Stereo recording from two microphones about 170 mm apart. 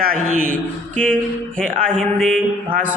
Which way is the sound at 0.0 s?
55° right (ahead or behind).